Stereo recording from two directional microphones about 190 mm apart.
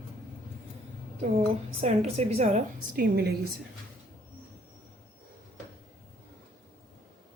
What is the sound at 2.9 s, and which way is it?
Speech, 55° right (ahead or behind).